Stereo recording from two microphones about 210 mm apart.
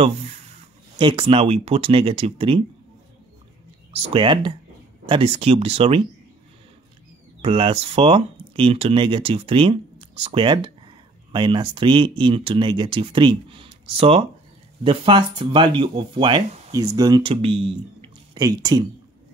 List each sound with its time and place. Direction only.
0.0 s speech: 30° right (ahead or behind)
3.9 s speech: 25° right (ahead or behind)
7.4 s speech: 25° right (ahead or behind)
18.0 s a sound: 20° right (ahead or behind)